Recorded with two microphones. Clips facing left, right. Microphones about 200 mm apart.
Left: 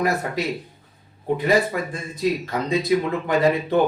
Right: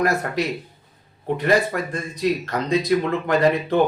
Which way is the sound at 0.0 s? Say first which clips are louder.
Right 1 dB; 5° left (ahead or behind).